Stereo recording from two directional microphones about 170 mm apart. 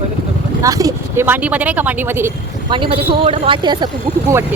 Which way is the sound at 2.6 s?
30° right (ahead or behind).